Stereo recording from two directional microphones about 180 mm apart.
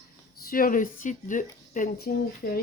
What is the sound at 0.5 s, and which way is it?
Speech, 50° left (ahead or behind).